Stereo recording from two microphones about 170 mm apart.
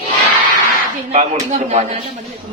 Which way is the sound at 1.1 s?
40° right (ahead or behind).